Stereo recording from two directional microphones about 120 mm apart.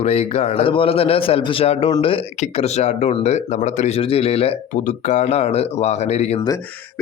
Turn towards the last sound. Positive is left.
turn(degrees=65)  # may be behind; listen again after turning